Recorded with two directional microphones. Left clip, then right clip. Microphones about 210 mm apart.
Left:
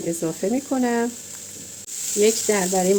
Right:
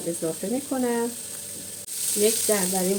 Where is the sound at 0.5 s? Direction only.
40° left (ahead or behind).